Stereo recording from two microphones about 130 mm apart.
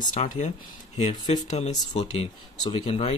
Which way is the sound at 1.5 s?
60° left (ahead or behind).